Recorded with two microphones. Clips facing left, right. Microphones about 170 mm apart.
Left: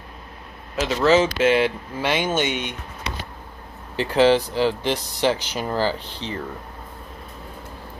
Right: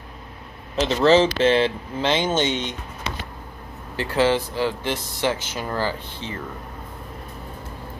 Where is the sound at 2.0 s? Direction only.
20° right (ahead or behind).